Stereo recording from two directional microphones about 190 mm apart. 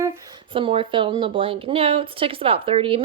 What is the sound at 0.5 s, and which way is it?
A woman's voice, 30° right (ahead or behind).